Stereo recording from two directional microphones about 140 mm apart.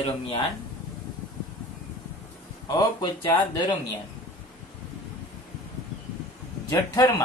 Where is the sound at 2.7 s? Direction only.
35° left (ahead or behind).